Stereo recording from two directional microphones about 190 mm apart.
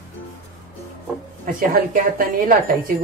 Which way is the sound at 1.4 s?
45° right (ahead or behind).